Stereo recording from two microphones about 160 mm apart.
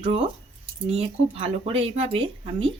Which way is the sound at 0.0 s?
35° right (ahead or behind).